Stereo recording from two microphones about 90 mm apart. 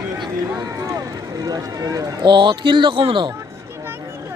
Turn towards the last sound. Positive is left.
turn(degrees=-65)  # may be behind; listen again after turning